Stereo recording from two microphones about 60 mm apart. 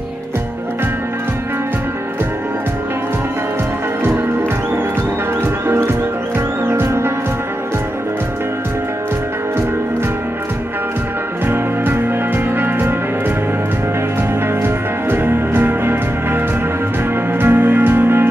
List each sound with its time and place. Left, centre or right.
5.7 s music: right
11.4 s music: right
14.6 s music: right